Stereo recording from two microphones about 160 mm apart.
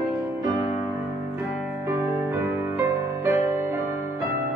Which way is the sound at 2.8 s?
15° right (ahead or behind).